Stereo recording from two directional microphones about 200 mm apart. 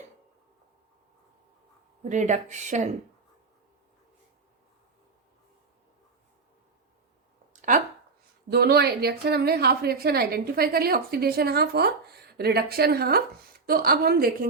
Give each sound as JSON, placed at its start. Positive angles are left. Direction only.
{"t": 2.0, "sound": "speech", "side_deg": -40}
{"t": 8.4, "sound": "a woman's voice", "side_deg": -50}